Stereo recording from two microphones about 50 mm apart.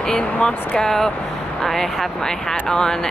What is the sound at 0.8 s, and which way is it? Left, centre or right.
Speech, centre.